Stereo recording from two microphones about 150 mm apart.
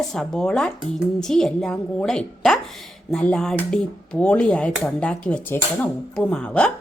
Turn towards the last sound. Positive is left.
turn(degrees=5)  # may be behind; listen again after turning